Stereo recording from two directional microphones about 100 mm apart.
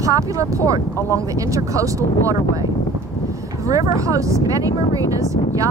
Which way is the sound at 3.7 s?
35° right (ahead or behind).